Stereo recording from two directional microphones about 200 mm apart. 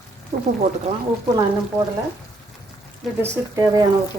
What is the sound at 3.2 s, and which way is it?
Speech, 15° right (ahead or behind).